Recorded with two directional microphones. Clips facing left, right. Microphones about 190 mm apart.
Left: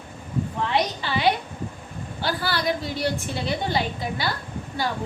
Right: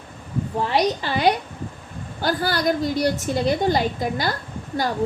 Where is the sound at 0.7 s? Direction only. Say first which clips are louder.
Right 5 dB; 45° right (ahead or behind).